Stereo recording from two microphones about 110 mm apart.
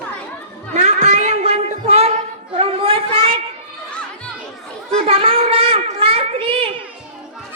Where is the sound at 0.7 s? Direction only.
90° right; by 3.4 s 55° right (ahead or behind).